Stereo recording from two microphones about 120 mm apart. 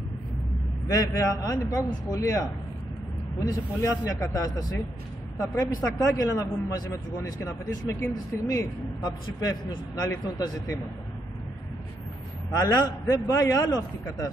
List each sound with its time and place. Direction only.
0.8 s a man's voice: 30° left (ahead or behind)
12.5 s a man's voice: 30° left (ahead or behind)